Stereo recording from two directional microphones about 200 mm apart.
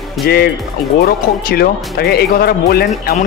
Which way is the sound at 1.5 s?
50° left (ahead or behind).